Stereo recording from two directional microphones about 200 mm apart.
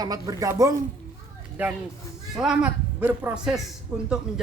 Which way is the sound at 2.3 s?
Centre (ahead or behind).